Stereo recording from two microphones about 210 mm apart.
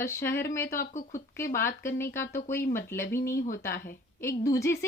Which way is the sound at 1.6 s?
10° left (ahead or behind).